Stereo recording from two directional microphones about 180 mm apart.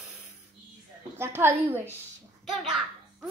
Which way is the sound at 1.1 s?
15° right (ahead or behind).